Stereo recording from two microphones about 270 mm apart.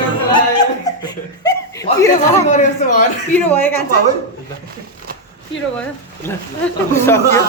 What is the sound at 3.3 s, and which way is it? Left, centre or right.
Speech, centre.